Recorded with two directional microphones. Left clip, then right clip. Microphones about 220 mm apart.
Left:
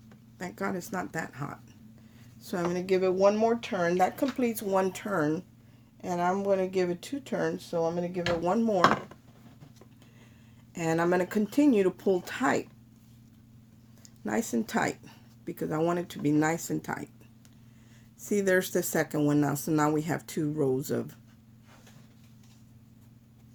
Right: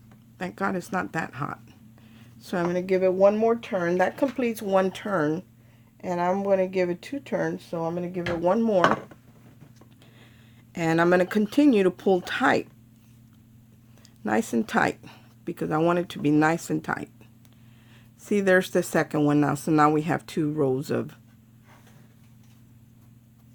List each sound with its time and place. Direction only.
0.3 s speech: 35° right (ahead or behind)
10.8 s speech: 35° right (ahead or behind)
14.3 s speech: 35° right (ahead or behind)
18.2 s speech: 35° right (ahead or behind)